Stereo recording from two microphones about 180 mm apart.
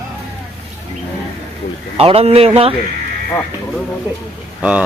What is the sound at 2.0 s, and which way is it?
Speech, 35° right (ahead or behind).